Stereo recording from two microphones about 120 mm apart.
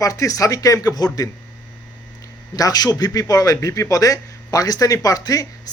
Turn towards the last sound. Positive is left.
turn(degrees=30)  # may be behind; listen again after turning